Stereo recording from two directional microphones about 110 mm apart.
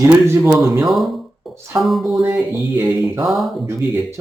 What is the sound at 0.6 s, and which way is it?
Speech, centre (ahead or behind).